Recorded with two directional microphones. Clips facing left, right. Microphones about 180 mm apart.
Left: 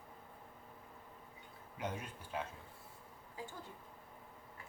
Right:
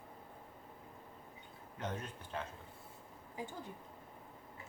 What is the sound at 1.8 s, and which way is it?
Speech, 10° left (ahead or behind).